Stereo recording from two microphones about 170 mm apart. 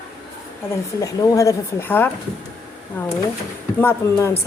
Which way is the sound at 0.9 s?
20° left (ahead or behind).